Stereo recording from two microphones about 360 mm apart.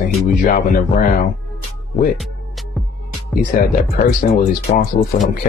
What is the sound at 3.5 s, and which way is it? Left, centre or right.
Speech, left.